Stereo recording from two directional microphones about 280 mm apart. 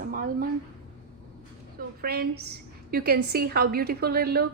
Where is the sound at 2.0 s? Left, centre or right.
Right.